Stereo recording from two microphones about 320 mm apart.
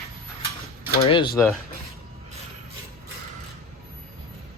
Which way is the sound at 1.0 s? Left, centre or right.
Centre.